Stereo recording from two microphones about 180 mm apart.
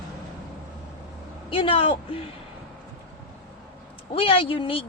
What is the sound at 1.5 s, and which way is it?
Speech, 30° left (ahead or behind).